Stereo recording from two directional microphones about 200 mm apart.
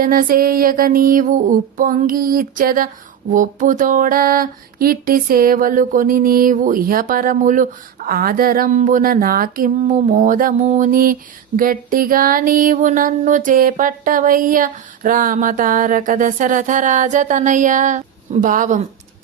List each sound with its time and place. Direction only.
0.0 s music: 45° right (ahead or behind)